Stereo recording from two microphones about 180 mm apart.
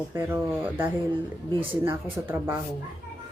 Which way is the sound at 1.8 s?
10° right (ahead or behind).